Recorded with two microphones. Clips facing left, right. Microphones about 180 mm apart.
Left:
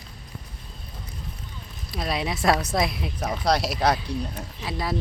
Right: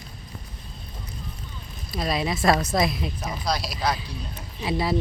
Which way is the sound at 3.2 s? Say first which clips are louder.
Left 7 dB; 65° left (ahead or behind).